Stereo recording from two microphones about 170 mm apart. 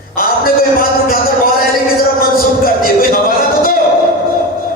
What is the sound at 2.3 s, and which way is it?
Music, 60° left (ahead or behind).